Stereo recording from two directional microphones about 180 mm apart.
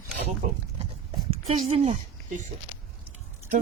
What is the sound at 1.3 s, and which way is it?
Speech, 35° right (ahead or behind).